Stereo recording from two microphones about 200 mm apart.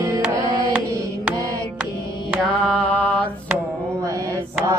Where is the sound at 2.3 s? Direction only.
5° left (ahead or behind).